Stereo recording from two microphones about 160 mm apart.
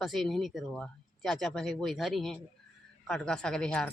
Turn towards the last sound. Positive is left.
turn(degrees=5)  # may be behind; listen again after turning